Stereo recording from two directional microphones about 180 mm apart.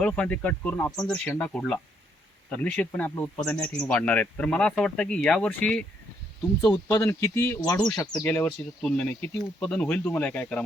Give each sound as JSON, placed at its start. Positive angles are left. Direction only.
{"t": 0.0, "sound": "speech", "side_deg": 5}
{"t": 6.8, "sound": "speech", "side_deg": 15}